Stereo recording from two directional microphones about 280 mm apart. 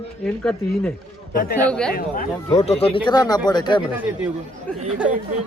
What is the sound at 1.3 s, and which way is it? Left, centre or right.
Speech, left.